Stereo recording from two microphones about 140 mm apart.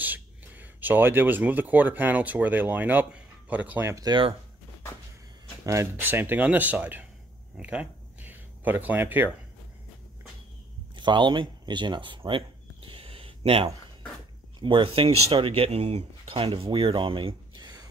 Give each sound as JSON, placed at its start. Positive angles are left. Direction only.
{"t": 0.0, "sound": "speech", "side_deg": -10}
{"t": 5.7, "sound": "speech", "side_deg": -15}
{"t": 7.5, "sound": "a sound", "side_deg": -10}
{"t": 11.0, "sound": "speech", "side_deg": -35}
{"t": 12.3, "sound": "a sound", "side_deg": -40}
{"t": 14.6, "sound": "speech", "side_deg": -35}